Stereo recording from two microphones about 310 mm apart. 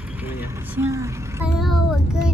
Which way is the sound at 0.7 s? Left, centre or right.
Centre.